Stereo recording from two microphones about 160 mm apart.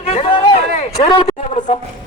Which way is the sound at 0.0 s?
40° left (ahead or behind).